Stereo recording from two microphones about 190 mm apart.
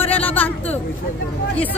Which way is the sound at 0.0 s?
10° left (ahead or behind).